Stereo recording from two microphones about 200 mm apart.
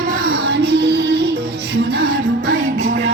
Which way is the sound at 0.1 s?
45° right (ahead or behind).